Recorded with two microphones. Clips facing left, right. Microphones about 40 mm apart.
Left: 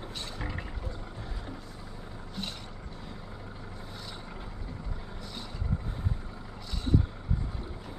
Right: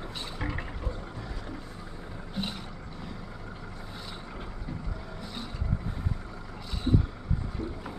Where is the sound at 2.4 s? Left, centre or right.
Centre.